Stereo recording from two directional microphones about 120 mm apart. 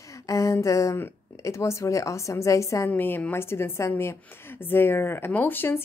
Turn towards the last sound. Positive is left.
turn(degrees=15)  # may be behind; listen again after turning